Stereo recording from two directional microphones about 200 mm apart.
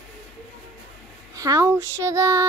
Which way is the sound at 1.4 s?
15° right (ahead or behind).